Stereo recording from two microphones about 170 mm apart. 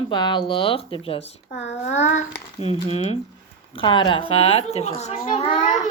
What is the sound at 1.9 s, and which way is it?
A child's voice, 45° left (ahead or behind).